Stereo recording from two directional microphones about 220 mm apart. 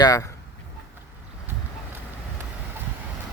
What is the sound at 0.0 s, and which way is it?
Speech, 15° left (ahead or behind).